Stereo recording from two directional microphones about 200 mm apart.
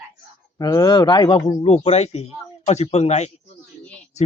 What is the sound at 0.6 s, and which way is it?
Speech, 20° left (ahead or behind).